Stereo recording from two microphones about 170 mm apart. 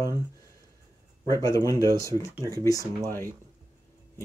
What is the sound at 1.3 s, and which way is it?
Speech, 20° left (ahead or behind).